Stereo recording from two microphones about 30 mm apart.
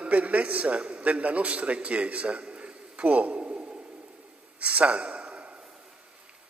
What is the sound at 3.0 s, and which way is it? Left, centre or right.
Speech, right.